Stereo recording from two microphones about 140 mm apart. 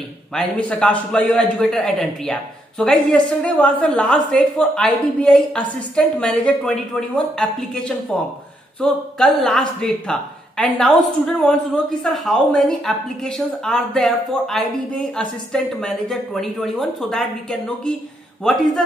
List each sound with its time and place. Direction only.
0.3 s a man's voice: 5° left (ahead or behind)